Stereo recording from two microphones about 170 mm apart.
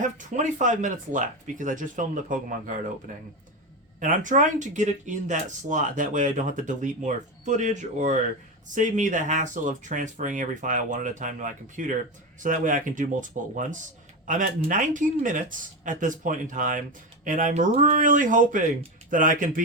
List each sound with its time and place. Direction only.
0.0 s speech: 45° right (ahead or behind)
4.0 s speech: 50° right (ahead or behind)